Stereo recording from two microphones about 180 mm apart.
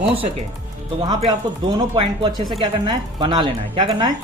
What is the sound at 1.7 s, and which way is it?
A woman's voice, 25° right (ahead or behind).